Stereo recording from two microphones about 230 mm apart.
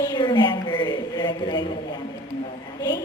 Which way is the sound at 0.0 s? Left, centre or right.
Centre.